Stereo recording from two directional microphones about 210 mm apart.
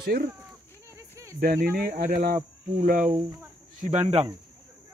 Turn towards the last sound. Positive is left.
turn(degrees=-35)  # may be behind; listen again after turning